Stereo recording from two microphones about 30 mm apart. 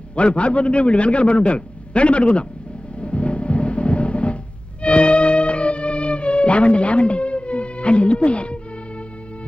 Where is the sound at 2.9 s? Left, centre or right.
Left.